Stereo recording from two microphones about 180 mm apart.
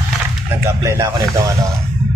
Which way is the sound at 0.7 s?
15° right (ahead or behind).